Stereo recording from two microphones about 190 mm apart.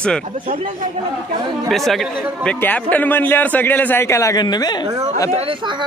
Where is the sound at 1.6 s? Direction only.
Centre (ahead or behind); by 4.9 s 20° left (ahead or behind).